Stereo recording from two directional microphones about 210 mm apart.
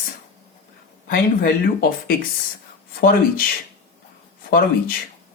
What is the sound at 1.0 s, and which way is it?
Speech, 45° left (ahead or behind).